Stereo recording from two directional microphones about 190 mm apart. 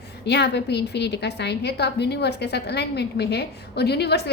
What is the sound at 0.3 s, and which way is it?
A woman's voice, 60° left (ahead or behind).